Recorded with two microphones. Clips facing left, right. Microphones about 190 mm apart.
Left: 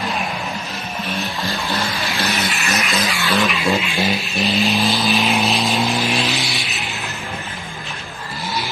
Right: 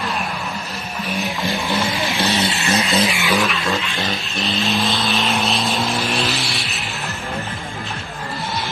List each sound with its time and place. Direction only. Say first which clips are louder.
1.0 s music: right 3 dB; 15° right (ahead or behind)
2.3 s vehicle: right 3 dB; 25° right (ahead or behind)
3.1 s vehicle: right 1 dB; 15° right (ahead or behind)
3.6 s vehicle: left 4 dB; 15° left (ahead or behind)